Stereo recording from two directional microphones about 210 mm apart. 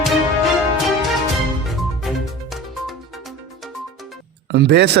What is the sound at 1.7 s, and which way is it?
Music, centre (ahead or behind).